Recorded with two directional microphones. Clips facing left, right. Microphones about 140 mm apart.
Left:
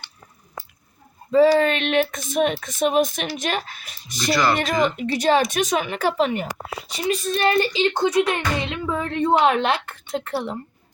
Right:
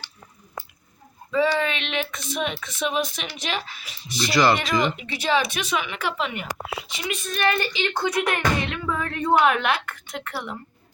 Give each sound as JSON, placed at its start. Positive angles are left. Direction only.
{"t": 1.3, "sound": "speech", "side_deg": 40}
{"t": 4.3, "sound": "speech", "side_deg": 0}
{"t": 4.5, "sound": "speech", "side_deg": 45}